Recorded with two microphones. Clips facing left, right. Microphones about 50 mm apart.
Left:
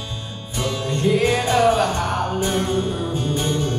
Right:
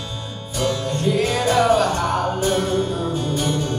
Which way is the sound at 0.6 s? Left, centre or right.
Left.